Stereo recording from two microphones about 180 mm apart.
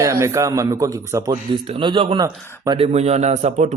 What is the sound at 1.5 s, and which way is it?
A man's voice, 30° right (ahead or behind).